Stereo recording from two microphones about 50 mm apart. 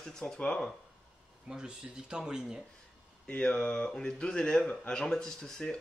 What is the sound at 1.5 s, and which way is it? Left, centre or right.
Speech, centre.